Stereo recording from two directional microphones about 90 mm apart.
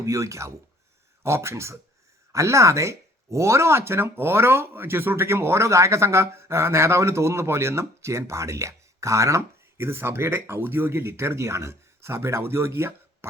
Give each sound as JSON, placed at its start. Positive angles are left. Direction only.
{"t": 0.0, "sound": "speech", "side_deg": -35}